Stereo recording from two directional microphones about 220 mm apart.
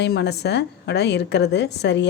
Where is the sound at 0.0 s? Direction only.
50° left (ahead or behind).